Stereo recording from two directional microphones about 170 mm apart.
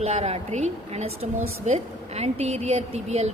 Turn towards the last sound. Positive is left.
turn(degrees=-40)  # may be behind; listen again after turning